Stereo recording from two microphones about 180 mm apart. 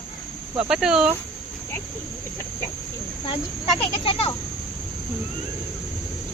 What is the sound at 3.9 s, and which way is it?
Speech, 30° left (ahead or behind).